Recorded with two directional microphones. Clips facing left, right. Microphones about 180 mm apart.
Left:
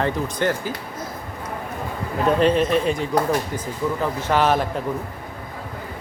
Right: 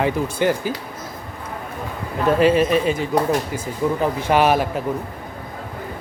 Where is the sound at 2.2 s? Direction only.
5° right (ahead or behind).